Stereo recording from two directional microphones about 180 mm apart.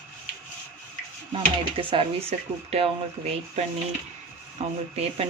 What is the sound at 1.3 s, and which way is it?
Speech, 30° right (ahead or behind).